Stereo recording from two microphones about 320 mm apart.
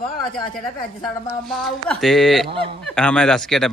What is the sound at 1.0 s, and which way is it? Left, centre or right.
A man's voice, centre.